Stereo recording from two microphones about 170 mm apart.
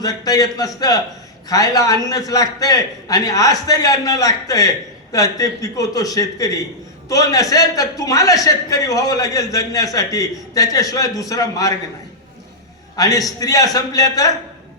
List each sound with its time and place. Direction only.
0.0 s a man's voice: 20° left (ahead or behind)
13.0 s a man's voice: 20° left (ahead or behind)